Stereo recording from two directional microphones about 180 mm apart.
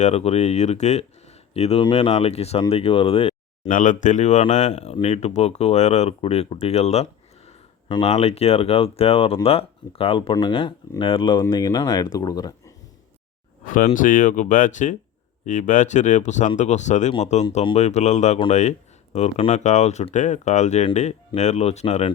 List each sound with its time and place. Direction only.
0.0 s speech: 35° left (ahead or behind)
3.7 s speech: 45° left (ahead or behind); by 12.7 s 20° left (ahead or behind)
13.7 s speech: 45° left (ahead or behind)